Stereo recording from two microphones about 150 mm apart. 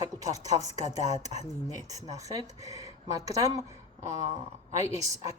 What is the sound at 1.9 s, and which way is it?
Speech, 25° right (ahead or behind).